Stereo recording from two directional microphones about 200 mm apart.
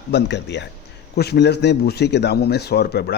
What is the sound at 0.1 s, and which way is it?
A man's voice, 60° left (ahead or behind).